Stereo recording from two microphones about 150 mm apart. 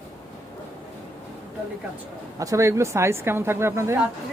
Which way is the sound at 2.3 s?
20° right (ahead or behind).